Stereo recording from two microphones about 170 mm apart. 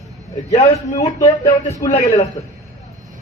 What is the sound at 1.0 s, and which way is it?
Speech, 25° left (ahead or behind).